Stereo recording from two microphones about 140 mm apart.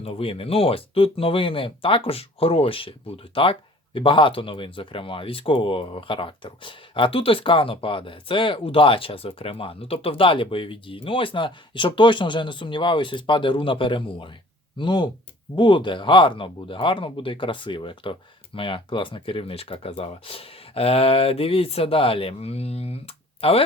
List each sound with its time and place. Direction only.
0.0 s speech: 45° left (ahead or behind)